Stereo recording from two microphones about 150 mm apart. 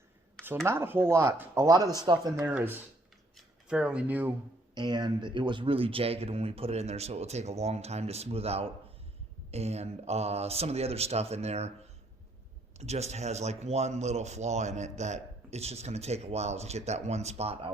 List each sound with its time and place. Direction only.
0.6 s speech: 15° right (ahead or behind)
2.4 s speech: 10° right (ahead or behind)
3.3 s a sound: 5° right (ahead or behind)
4.7 s speech: 30° right (ahead or behind); by 11.7 s 45° right (ahead or behind)
12.8 s speech: 45° right (ahead or behind)